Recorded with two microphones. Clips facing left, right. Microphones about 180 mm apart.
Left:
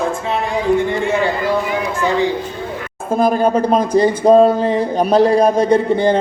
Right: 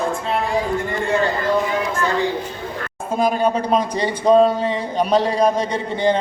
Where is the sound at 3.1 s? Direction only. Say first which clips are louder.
Left 4 dB; 45° left (ahead or behind).